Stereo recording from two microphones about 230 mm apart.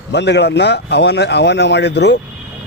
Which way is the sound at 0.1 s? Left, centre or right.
Left.